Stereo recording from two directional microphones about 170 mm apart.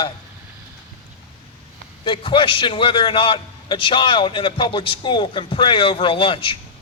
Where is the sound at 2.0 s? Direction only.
30° left (ahead or behind).